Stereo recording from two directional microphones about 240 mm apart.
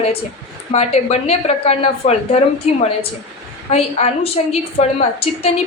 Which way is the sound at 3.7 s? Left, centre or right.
Left.